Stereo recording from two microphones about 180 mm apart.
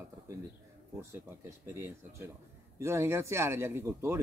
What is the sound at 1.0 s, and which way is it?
Speech, 15° right (ahead or behind).